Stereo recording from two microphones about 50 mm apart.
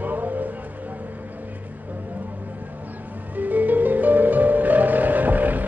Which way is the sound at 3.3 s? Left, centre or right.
Right.